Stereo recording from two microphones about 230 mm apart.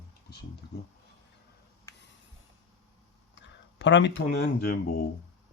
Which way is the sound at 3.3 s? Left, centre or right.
Left.